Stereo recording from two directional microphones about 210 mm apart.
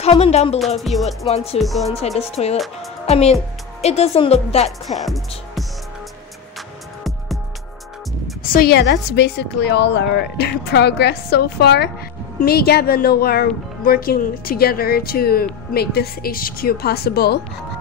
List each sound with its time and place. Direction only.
0.0 s a woman's voice: 30° left (ahead or behind)
0.7 s speech: centre (ahead or behind)
1.0 s a woman's voice: 30° left (ahead or behind)
1.6 s speech: centre (ahead or behind)
2.0 s a woman's voice: 30° left (ahead or behind)
4.8 s speech: centre (ahead or behind)
8.5 s speech: 50° left (ahead or behind)